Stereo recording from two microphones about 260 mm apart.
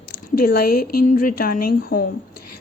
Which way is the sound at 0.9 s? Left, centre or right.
Left.